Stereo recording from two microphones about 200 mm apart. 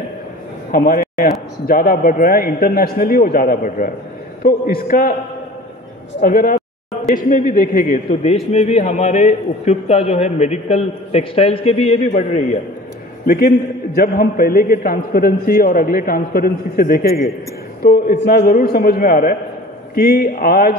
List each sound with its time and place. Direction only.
0.7 s a man's voice: 45° left (ahead or behind)
6.2 s a man's voice: 45° left (ahead or behind)
13.3 s a man's voice: 45° left (ahead or behind)